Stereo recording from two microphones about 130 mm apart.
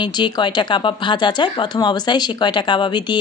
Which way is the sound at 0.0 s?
35° left (ahead or behind).